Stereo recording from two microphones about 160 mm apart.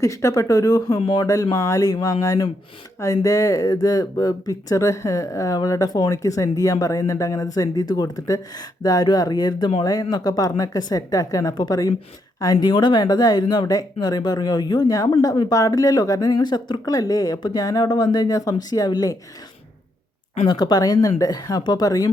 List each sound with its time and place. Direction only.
0.0 s a woman's voice: 20° left (ahead or behind)
20.3 s a woman's voice: 30° left (ahead or behind)